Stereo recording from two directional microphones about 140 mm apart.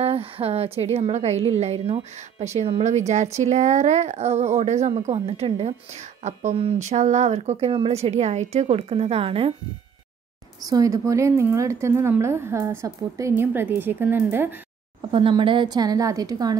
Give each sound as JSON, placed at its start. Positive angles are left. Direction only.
{"t": 0.0, "sound": "speech", "side_deg": -45}
{"t": 10.7, "sound": "a woman's voice", "side_deg": -25}
{"t": 15.0, "sound": "a woman's voice", "side_deg": -35}